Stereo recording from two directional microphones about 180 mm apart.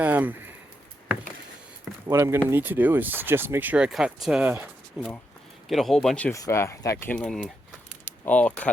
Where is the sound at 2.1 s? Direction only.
15° right (ahead or behind); by 6.3 s centre (ahead or behind).